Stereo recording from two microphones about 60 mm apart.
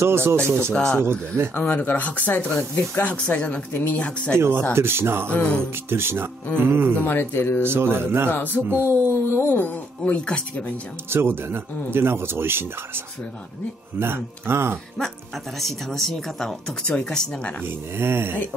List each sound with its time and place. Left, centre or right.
0.0 s speech: right
0.7 s speech: centre
1.5 s speech: left
4.4 s speech: right
5.3 s speech: centre
5.9 s speech: right
7.1 s speech: left
7.6 s speech: right
9.3 s speech: left; by 10.4 s centre
11.1 s speech: right
15.6 s speech: centre
17.9 s speech: right